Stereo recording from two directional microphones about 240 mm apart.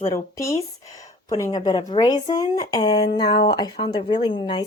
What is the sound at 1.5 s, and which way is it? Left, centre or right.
Speech, centre.